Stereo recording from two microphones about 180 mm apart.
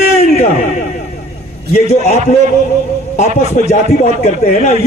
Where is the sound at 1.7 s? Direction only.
40° left (ahead or behind).